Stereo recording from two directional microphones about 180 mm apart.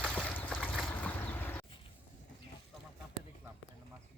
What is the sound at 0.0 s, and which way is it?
Boat, 5° left (ahead or behind).